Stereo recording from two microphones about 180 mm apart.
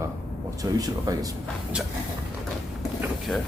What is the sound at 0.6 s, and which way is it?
Speech, 20° right (ahead or behind).